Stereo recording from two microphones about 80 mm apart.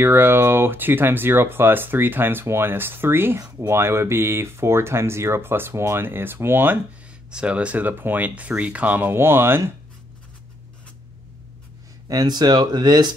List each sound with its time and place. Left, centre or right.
0.0 s speech: right
7.2 s speech: centre; by 9.7 s right
12.1 s speech: right